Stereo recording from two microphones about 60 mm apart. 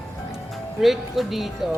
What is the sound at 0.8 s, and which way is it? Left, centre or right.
Speech, centre.